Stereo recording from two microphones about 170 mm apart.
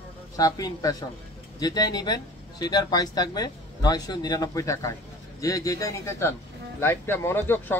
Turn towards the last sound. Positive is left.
turn(degrees=10)  # may be behind; listen again after turning